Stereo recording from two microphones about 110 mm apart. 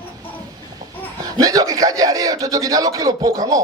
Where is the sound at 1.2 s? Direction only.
35° right (ahead or behind).